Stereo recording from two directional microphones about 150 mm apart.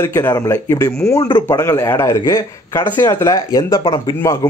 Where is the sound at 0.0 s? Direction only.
15° left (ahead or behind).